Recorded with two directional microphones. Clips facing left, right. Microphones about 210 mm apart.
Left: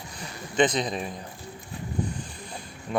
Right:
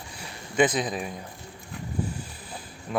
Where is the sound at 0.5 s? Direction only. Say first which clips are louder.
Even; 10° right (ahead or behind).